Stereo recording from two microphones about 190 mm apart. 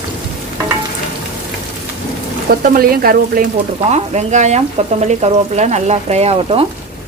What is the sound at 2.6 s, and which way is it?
Speech, 50° right (ahead or behind).